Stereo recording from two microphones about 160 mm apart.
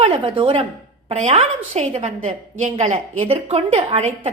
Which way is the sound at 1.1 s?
45° right (ahead or behind).